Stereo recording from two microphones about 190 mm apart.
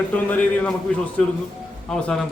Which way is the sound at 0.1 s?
5° left (ahead or behind).